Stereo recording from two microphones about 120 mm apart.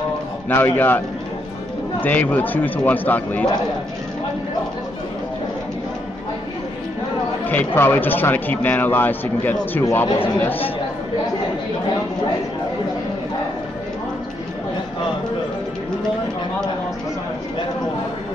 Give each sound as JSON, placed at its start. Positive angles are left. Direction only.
{"t": 0.5, "sound": "speech", "side_deg": 20}
{"t": 7.4, "sound": "speech", "side_deg": 15}